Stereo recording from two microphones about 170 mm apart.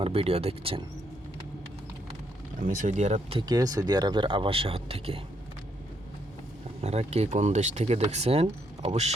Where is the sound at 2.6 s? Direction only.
45° right (ahead or behind).